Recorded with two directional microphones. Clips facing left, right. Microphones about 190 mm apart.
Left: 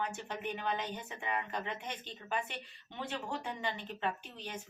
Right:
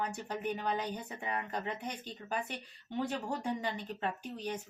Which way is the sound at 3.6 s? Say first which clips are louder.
Right 1 dB; 40° right (ahead or behind).